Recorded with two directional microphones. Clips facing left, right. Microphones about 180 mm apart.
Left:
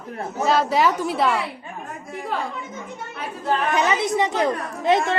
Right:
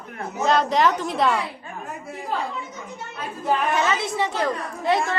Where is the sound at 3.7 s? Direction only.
15° left (ahead or behind).